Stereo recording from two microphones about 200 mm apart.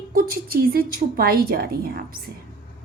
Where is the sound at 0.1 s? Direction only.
45° right (ahead or behind).